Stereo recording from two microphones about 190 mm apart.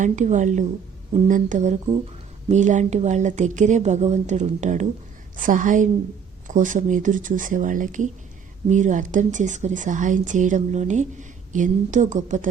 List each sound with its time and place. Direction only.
0.0 s a woman's voice: 40° right (ahead or behind)